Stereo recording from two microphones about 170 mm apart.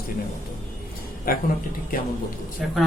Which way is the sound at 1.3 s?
60° left (ahead or behind).